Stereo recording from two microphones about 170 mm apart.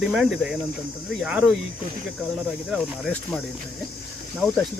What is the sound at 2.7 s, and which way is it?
Speech, 5° left (ahead or behind).